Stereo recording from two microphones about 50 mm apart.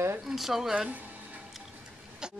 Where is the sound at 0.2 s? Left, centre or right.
Centre.